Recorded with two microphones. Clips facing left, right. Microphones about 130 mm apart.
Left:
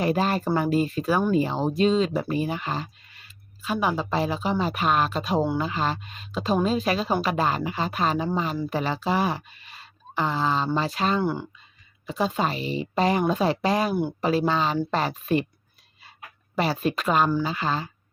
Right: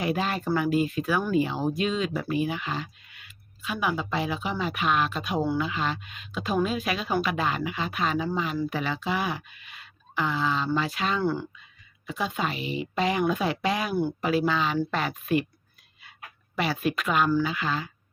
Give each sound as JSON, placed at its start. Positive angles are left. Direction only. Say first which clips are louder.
{"t": 0.0, "sound": "speech", "louder": "left 4 dB", "side_deg": 40}
{"t": 11.2, "sound": "speech", "louder": "left 1 dB", "side_deg": 15}
{"t": 12.0, "sound": "speech", "louder": "left 4 dB", "side_deg": 35}
{"t": 16.6, "sound": "speech", "louder": "left 2 dB", "side_deg": 35}